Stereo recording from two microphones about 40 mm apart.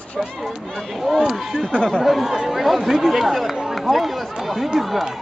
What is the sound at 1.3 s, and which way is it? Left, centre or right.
Speech, centre.